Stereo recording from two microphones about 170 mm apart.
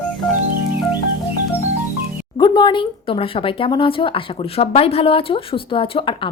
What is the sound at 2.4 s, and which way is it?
A woman's voice, 25° left (ahead or behind).